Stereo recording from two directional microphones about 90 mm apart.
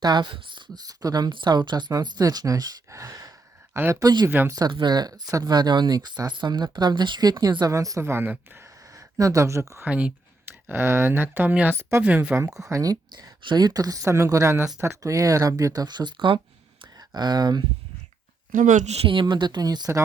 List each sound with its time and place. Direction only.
0.0 s speech: 55° right (ahead or behind)
0.7 s speech: 45° right (ahead or behind)
4.0 s speech: 55° right (ahead or behind)
4.3 s speech: 25° right (ahead or behind)
4.7 s speech: 55° right (ahead or behind)
7.7 s speech: 35° right (ahead or behind)
8.9 s speech: 40° right (ahead or behind)
9.8 s speech: 15° right (ahead or behind)
11.8 s speech: 30° right (ahead or behind)
12.0 s speech: 15° right (ahead or behind)
12.5 s speech: 35° right (ahead or behind); by 16.4 s 60° right (ahead or behind)
17.2 s speech: 50° right (ahead or behind)
19.0 s speech: 65° right (ahead or behind); by 19.9 s 50° right (ahead or behind)